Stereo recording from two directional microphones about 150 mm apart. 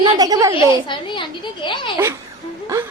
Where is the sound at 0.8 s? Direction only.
30° left (ahead or behind).